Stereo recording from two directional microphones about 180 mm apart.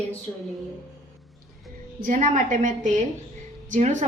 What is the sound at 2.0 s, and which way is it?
A woman's voice, 45° right (ahead or behind).